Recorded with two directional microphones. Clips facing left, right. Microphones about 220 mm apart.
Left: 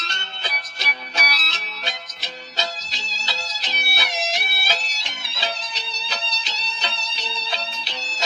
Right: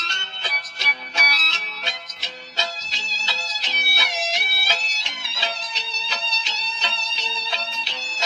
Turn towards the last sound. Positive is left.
turn(degrees=35)  # may be behind; listen again after turning